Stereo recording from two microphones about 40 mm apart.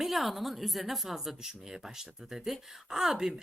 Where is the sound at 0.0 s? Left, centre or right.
Centre.